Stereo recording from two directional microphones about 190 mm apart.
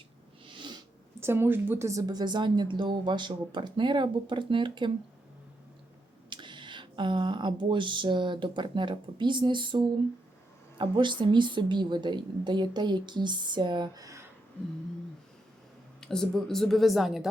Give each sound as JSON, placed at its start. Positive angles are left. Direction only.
{"t": 0.4, "sound": "a sound", "side_deg": -25}
{"t": 1.2, "sound": "a woman's voice", "side_deg": -10}
{"t": 6.3, "sound": "a woman's voice", "side_deg": -25}
{"t": 16.0, "sound": "speech", "side_deg": 5}